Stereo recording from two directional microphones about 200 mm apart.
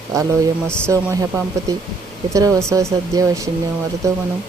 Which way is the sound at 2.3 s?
15° right (ahead or behind).